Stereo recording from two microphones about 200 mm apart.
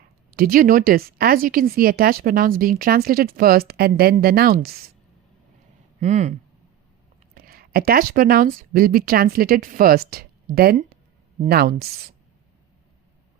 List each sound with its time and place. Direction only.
0.3 s speech: 45° right (ahead or behind)
6.0 s speech: 35° right (ahead or behind)
7.3 s speech: 45° right (ahead or behind)